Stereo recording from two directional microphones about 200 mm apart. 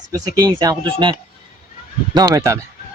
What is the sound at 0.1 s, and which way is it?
Speech, 20° right (ahead or behind).